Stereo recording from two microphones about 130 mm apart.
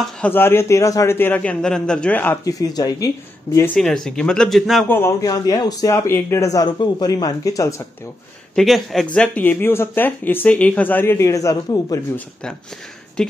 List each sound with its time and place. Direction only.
0.3 s speech: 20° left (ahead or behind)
2.4 s speech: 30° left (ahead or behind)
3.7 s speech: 5° left (ahead or behind)
4.8 s speech: 15° left (ahead or behind)
5.2 s speech: 30° left (ahead or behind)
8.5 s speech: centre (ahead or behind); by 12.1 s 25° left (ahead or behind)
13.2 s speech: 5° left (ahead or behind)